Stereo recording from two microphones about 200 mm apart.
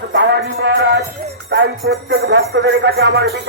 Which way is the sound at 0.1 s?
60° right (ahead or behind).